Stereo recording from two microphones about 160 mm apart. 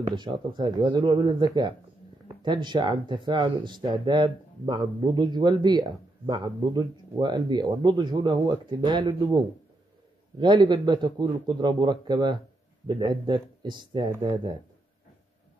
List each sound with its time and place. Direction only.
0.1 s speech: 30° right (ahead or behind)
10.4 s speech: 30° right (ahead or behind)